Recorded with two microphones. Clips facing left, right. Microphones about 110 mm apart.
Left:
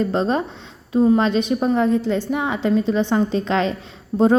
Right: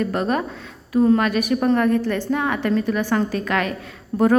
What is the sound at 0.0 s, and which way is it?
A woman's voice, 25° left (ahead or behind).